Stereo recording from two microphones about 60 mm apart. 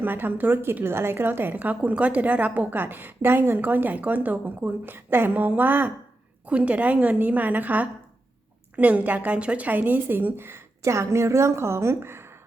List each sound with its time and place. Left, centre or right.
0.0 s a woman's voice: right
10.9 s a woman's voice: right